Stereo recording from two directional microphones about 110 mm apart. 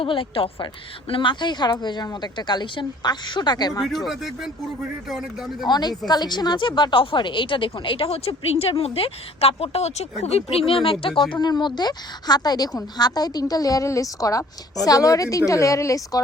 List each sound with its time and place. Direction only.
0.0 s a woman's voice: 55° left (ahead or behind); by 3.8 s 35° left (ahead or behind)
3.8 s speech: centre (ahead or behind)
5.6 s a woman's voice: 40° left (ahead or behind); by 10.9 s 55° left (ahead or behind)
11.2 s a woman's voice: 40° left (ahead or behind)